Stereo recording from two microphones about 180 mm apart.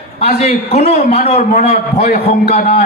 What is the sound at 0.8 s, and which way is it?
A man's voice, 55° left (ahead or behind).